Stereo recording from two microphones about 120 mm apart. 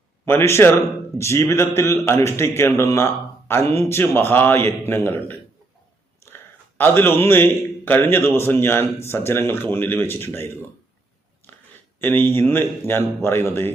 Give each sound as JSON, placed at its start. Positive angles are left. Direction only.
{"t": 0.3, "sound": "a man's voice", "side_deg": 20}
{"t": 11.9, "sound": "a man's voice", "side_deg": 15}